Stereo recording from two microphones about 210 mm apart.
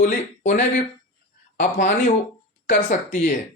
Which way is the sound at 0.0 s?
40° left (ahead or behind).